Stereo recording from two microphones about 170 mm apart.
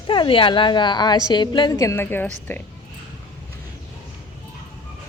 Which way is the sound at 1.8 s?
15° left (ahead or behind).